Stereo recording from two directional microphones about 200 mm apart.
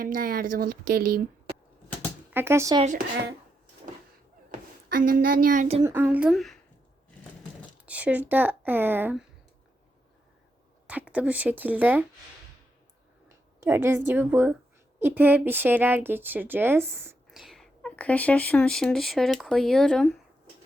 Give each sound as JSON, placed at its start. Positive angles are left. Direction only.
{"t": 0.0, "sound": "speech", "side_deg": -45}
{"t": 2.3, "sound": "speech", "side_deg": -10}
{"t": 4.9, "sound": "speech", "side_deg": -45}
{"t": 5.8, "sound": "speech", "side_deg": -10}
{"t": 7.9, "sound": "speech", "side_deg": -5}
{"t": 10.8, "sound": "speech", "side_deg": -5}
{"t": 13.2, "sound": "a sound", "side_deg": -10}
{"t": 14.1, "sound": "speech", "side_deg": -10}
{"t": 17.3, "sound": "speech", "side_deg": 0}